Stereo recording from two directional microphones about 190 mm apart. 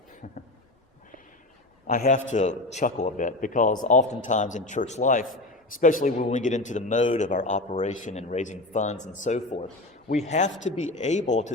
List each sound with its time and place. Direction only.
1.9 s speech: 40° left (ahead or behind)